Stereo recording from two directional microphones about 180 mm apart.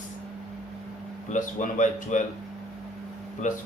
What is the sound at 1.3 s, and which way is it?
Speech, 45° left (ahead or behind).